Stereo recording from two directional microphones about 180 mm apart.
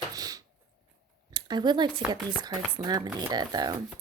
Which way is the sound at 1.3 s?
25° right (ahead or behind).